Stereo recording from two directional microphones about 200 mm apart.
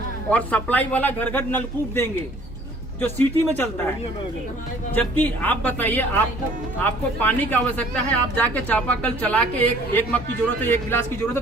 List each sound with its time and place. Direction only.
0.3 s speech: 5° left (ahead or behind)
4.9 s speech: 10° left (ahead or behind)